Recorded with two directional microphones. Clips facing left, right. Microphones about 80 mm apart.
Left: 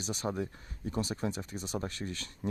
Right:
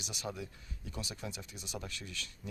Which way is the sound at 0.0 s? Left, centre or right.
Left.